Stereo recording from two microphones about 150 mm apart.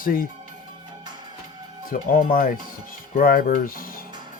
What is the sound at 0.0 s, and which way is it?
Speech, 70° left (ahead or behind).